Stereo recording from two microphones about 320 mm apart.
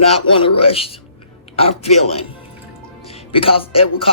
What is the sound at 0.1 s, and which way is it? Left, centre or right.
Speech, centre.